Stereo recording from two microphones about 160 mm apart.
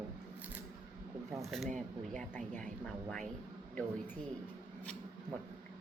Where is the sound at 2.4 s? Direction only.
55° right (ahead or behind).